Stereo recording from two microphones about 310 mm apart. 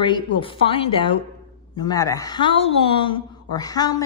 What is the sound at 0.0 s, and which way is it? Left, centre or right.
A woman's voice, centre.